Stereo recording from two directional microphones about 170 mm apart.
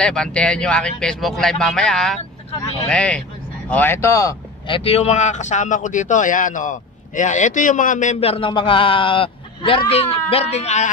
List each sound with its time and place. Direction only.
0.0 s a man's voice: 5° left (ahead or behind)
4.7 s a man's voice: 35° left (ahead or behind)